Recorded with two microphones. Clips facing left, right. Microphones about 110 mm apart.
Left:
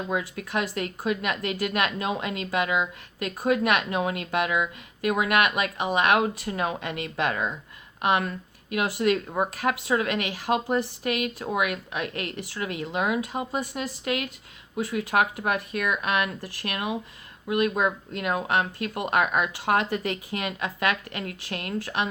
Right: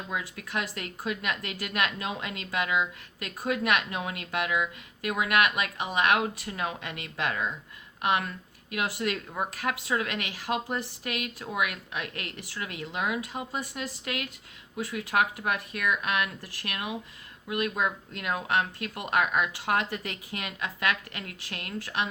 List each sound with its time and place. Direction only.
0.1 s a woman's voice: 30° left (ahead or behind)
8.7 s a woman's voice: 25° left (ahead or behind)